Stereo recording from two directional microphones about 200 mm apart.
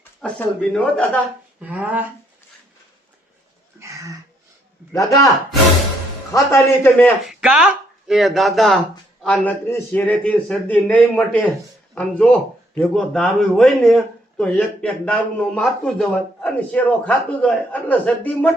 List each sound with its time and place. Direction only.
0.2 s a man's voice: 5° left (ahead or behind)
1.6 s speech: 5° right (ahead or behind)
3.8 s a sound: 15° right (ahead or behind)
4.9 s a man's voice: 15° left (ahead or behind)
6.3 s a man's voice: 10° left (ahead or behind)
7.3 s a man's voice: 5° right (ahead or behind)